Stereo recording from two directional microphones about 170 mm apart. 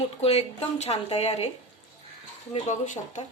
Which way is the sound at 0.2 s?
40° left (ahead or behind).